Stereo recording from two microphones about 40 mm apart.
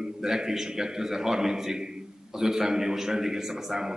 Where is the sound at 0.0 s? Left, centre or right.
Centre.